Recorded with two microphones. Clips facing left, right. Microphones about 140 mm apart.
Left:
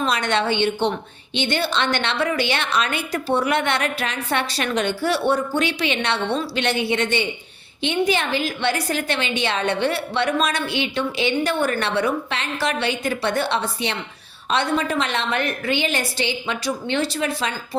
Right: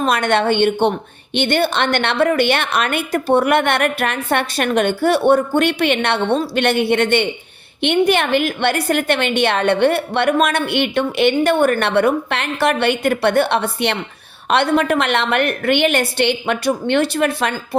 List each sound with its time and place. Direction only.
0.0 s a woman's voice: 55° right (ahead or behind)